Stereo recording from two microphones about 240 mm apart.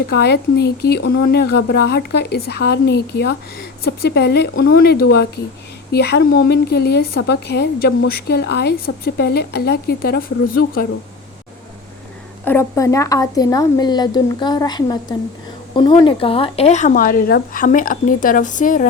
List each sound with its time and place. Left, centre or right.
0.2 s a woman's voice: left
12.5 s a woman's voice: centre; by 18.9 s left